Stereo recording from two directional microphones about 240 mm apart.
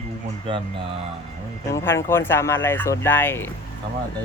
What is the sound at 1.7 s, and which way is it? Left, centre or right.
Speech, centre.